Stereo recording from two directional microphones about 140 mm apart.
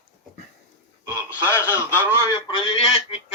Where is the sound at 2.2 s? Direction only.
30° left (ahead or behind).